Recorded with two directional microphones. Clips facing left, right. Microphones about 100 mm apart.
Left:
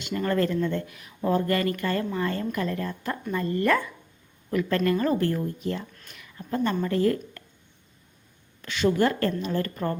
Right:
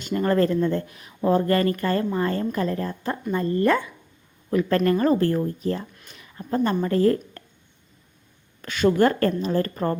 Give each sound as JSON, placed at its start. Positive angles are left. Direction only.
{"t": 0.0, "sound": "speech", "side_deg": -35}
{"t": 4.9, "sound": "a woman's voice", "side_deg": -35}
{"t": 8.6, "sound": "a woman's voice", "side_deg": -45}
{"t": 9.2, "sound": "speech", "side_deg": -35}